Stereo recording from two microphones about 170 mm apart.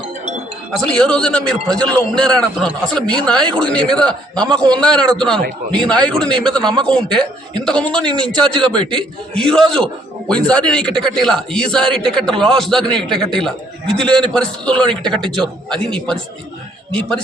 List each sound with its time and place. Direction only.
0.9 s speech: 5° left (ahead or behind)
8.7 s a man's voice: 30° right (ahead or behind)
9.0 s speech: 5° left (ahead or behind)